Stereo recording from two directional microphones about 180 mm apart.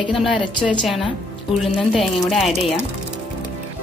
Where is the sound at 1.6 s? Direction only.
Centre (ahead or behind).